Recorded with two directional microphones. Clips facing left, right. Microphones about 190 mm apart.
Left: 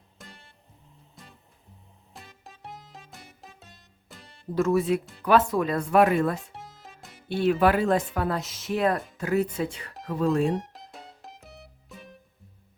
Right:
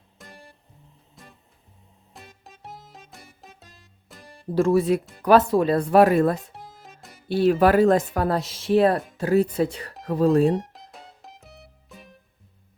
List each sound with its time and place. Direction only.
0.2 s music: centre (ahead or behind)
4.5 s speech: 30° right (ahead or behind)
6.5 s music: centre (ahead or behind)
7.3 s speech: 35° right (ahead or behind)
10.5 s music: centre (ahead or behind)